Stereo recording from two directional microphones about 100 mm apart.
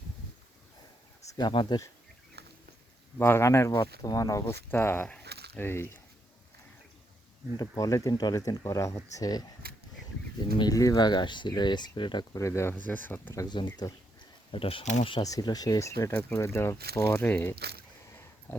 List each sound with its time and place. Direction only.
1.5 s speech: 55° left (ahead or behind)
3.2 s speech: 25° left (ahead or behind)
3.8 s speech: 40° left (ahead or behind)
4.7 s speech: 20° left (ahead or behind)
5.0 s a sound: 10° left (ahead or behind)
5.6 s speech: 25° left (ahead or behind)
7.5 s speech: 40° left (ahead or behind)
10.6 s speech: 35° left (ahead or behind); by 12.2 s 50° left (ahead or behind)
12.3 s speech: 30° left (ahead or behind)
12.7 s speech: 15° left (ahead or behind)
13.5 s speech: 50° left (ahead or behind)
14.5 s speech: 65° left (ahead or behind)
15.2 s speech: 40° left (ahead or behind); by 17.5 s 25° left (ahead or behind)